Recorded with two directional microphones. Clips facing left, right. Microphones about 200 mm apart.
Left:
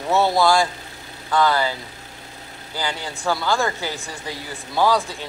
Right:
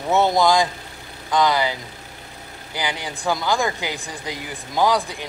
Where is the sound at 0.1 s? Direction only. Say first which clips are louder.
Even; 20° right (ahead or behind).